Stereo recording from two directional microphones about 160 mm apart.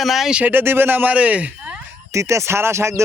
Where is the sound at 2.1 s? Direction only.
20° right (ahead or behind).